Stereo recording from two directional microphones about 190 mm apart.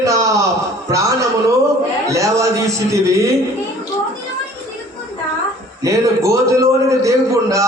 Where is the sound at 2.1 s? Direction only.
15° right (ahead or behind).